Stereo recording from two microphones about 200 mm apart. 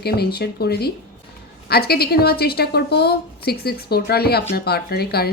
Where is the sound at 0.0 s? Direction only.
50° left (ahead or behind).